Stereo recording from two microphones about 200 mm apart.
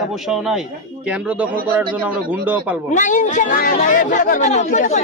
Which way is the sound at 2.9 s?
40° left (ahead or behind).